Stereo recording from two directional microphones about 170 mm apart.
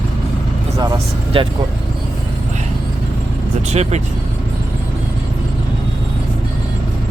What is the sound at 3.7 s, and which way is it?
Speech, 40° right (ahead or behind).